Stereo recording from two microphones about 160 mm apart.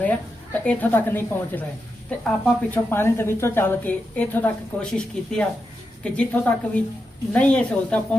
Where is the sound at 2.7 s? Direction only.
15° left (ahead or behind).